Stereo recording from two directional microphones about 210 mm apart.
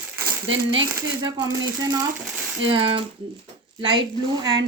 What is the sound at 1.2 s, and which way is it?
A woman's voice, 20° right (ahead or behind).